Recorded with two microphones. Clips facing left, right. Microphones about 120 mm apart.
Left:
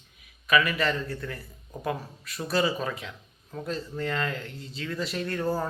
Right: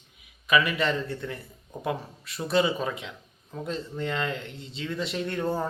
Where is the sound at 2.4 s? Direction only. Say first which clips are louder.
Right 2 dB; 20° right (ahead or behind).